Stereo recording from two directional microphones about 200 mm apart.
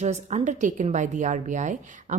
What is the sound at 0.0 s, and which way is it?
A woman's voice, 35° right (ahead or behind).